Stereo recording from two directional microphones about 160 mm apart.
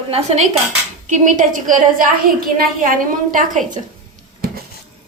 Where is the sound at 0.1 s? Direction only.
40° right (ahead or behind); by 2.6 s 65° right (ahead or behind).